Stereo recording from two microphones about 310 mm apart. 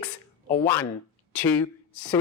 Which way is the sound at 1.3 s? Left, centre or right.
Centre.